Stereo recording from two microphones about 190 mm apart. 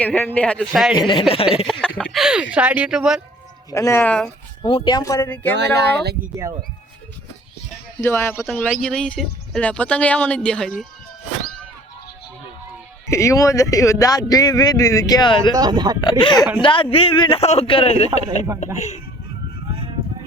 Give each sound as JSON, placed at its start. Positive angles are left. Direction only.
{"t": 0.0, "sound": "speech", "side_deg": 10}
{"t": 0.9, "sound": "a man's voice", "side_deg": 25}
{"t": 1.7, "sound": "speech", "side_deg": 0}
{"t": 3.7, "sound": "speech", "side_deg": 15}
{"t": 4.6, "sound": "speech", "side_deg": 20}
{"t": 5.5, "sound": "speech", "side_deg": -60}
{"t": 8.0, "sound": "speech", "side_deg": 10}
{"t": 13.1, "sound": "speech", "side_deg": 15}
{"t": 15.5, "sound": "speech", "side_deg": -20}
{"t": 16.0, "sound": "a man's voice", "side_deg": 25}